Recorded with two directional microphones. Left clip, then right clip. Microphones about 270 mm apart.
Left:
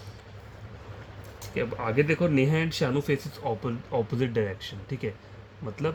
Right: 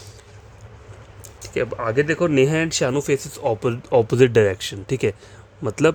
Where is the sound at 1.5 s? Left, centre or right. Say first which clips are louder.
Right 6 dB; right.